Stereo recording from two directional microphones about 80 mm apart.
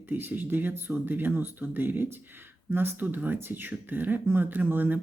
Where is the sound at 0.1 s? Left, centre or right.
Right.